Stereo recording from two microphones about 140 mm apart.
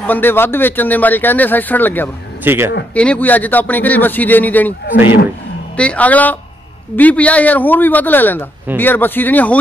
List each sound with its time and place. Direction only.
0.0 s speech: 15° left (ahead or behind)
2.4 s speech: 15° right (ahead or behind)
2.9 s speech: 10° left (ahead or behind)
5.8 s speech: 10° left (ahead or behind)